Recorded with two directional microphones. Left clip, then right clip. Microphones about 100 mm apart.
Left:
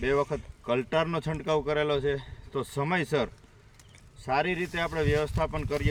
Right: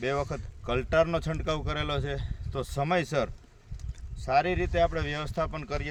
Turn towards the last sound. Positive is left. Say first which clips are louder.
# left 2 dB
turn(degrees=-45)  # may be behind; listen again after turning